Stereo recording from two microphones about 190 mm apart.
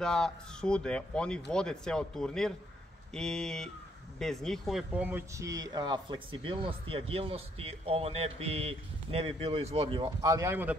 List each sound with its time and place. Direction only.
0.0 s speech: 5° left (ahead or behind)